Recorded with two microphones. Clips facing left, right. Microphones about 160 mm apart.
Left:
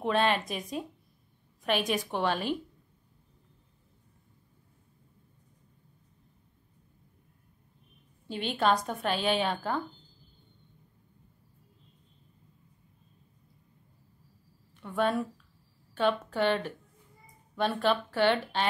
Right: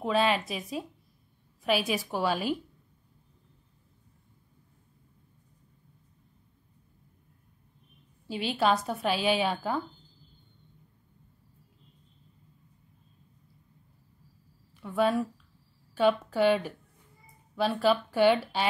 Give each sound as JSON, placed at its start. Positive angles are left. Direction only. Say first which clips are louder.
{"t": 0.0, "sound": "a woman's voice", "louder": "right 1 dB", "side_deg": -5}
{"t": 8.3, "sound": "a woman's voice", "louder": "right 1 dB", "side_deg": -5}
{"t": 14.8, "sound": "a woman's voice", "louder": "right 2 dB", "side_deg": -5}